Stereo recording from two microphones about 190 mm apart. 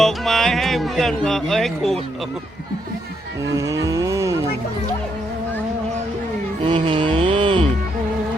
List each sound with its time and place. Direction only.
0.0 s speech: centre (ahead or behind)
3.5 s a sound: 15° right (ahead or behind)
6.7 s music: 25° right (ahead or behind)